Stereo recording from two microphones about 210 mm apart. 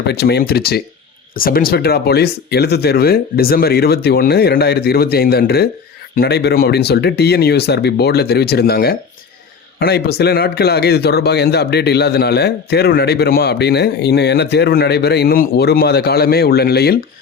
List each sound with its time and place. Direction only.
0.1 s a man's voice: 50° left (ahead or behind)